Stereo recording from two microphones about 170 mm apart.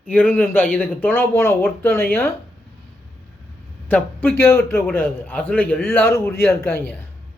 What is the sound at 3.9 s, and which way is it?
A man's voice, 15° left (ahead or behind).